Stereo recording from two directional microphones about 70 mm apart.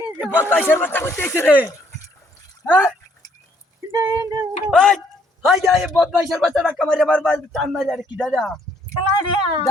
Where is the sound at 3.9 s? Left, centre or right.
Right.